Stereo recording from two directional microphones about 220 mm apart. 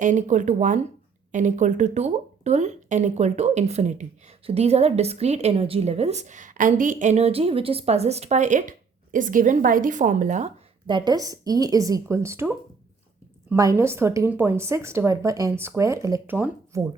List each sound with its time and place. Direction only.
0.0 s a woman's voice: 35° right (ahead or behind)
10.8 s a woman's voice: 20° right (ahead or behind)